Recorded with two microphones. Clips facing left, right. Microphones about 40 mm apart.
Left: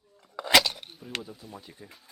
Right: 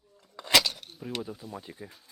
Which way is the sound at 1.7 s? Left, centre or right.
Centre.